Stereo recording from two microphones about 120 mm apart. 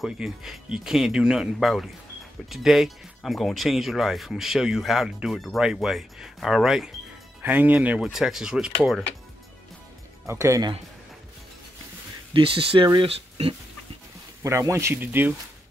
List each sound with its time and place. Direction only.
0.0 s speech: 5° right (ahead or behind)
10.2 s speech: 25° right (ahead or behind)
12.4 s speech: 45° right (ahead or behind)
12.8 s speech: 35° right (ahead or behind)
13.1 s speech: 55° right (ahead or behind)
14.4 s speech: 25° right (ahead or behind)